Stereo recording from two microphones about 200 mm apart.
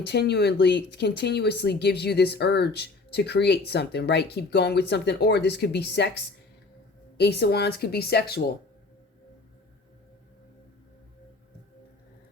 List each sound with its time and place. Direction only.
0.0 s speech: 55° left (ahead or behind)